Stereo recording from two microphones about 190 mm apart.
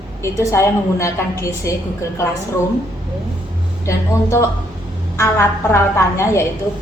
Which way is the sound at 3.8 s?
15° left (ahead or behind).